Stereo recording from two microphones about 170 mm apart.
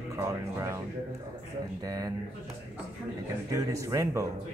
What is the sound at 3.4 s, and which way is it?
Speech, 20° right (ahead or behind).